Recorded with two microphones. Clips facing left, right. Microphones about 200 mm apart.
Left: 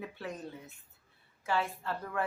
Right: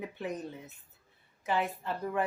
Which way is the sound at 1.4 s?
20° right (ahead or behind).